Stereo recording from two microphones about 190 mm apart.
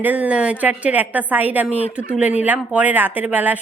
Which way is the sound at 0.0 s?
10° right (ahead or behind).